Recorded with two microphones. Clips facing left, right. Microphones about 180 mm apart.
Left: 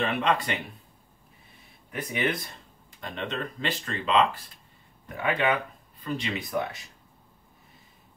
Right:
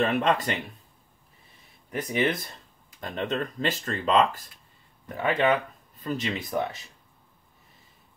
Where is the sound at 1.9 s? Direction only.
40° right (ahead or behind).